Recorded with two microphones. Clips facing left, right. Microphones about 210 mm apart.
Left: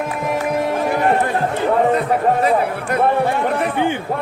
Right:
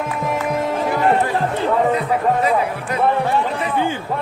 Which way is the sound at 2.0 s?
50° left (ahead or behind).